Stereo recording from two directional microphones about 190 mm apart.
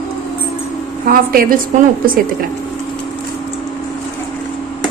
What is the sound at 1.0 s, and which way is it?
Speech, 50° right (ahead or behind).